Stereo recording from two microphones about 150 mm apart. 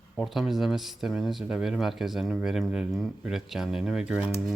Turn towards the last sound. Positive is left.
turn(degrees=-5)  # may be behind; listen again after turning